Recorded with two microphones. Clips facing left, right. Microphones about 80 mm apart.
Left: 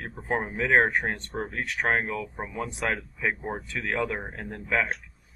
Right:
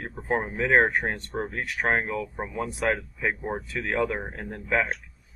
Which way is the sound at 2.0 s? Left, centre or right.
Right.